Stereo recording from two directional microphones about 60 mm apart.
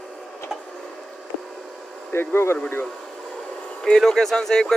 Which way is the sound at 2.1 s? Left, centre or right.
Left.